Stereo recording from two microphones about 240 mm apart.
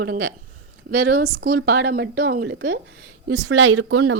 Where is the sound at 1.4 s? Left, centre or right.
Right.